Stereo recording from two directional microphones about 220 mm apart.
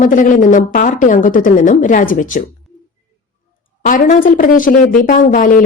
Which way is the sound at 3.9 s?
35° left (ahead or behind).